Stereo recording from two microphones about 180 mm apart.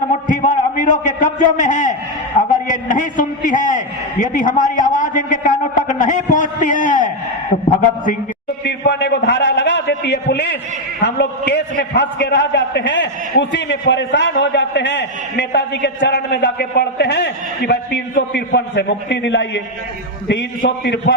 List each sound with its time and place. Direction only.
0.3 s a man's voice: 45° left (ahead or behind)
8.6 s a sound: 75° left (ahead or behind)
11.0 s a man's voice: 70° left (ahead or behind); by 19.6 s 90° left
20.7 s a man's voice: 75° left (ahead or behind)